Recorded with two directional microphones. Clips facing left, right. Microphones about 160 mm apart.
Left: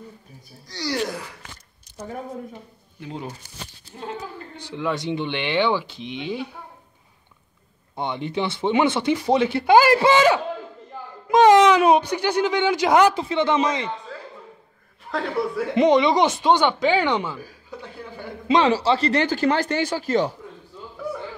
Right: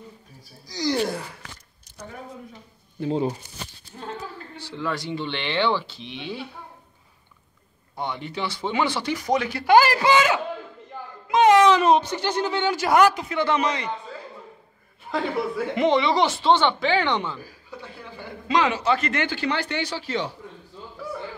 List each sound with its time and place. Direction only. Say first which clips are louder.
0.7 s speech: right 4 dB; 15° right (ahead or behind)
3.0 s speech: right 9 dB; 30° right (ahead or behind)
4.0 s speech: left 2 dB; 15° left (ahead or behind)
7.9 s speech: left 4 dB; 20° left (ahead or behind)
11.2 s a sound: left 3 dB; 40° left (ahead or behind)
11.6 s speech: left 1 dB; 10° left (ahead or behind)
15.0 s a man's voice: left 1 dB; centre (ahead or behind)
15.7 s speech: left 4 dB; 20° left (ahead or behind)
18.5 s speech: left 3 dB; 30° left (ahead or behind)